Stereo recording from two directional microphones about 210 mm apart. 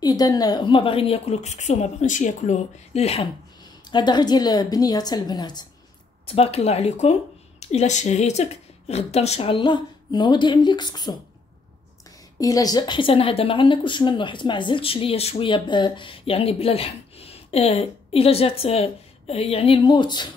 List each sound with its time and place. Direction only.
0.0 s a woman's voice: 20° left (ahead or behind)
12.4 s a woman's voice: 15° left (ahead or behind)